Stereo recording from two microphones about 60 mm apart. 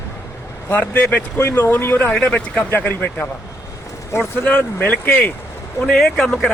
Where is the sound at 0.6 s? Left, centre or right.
Left.